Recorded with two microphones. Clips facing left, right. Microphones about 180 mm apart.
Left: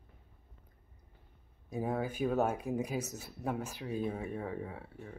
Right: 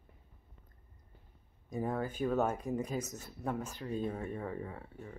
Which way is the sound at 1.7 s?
10° left (ahead or behind).